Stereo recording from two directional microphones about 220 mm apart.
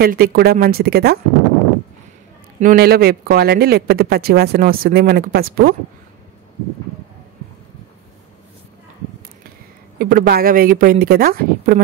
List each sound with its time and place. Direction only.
0.0 s speech: 45° right (ahead or behind)
2.6 s speech: 40° right (ahead or behind)
9.9 s speech: 40° right (ahead or behind)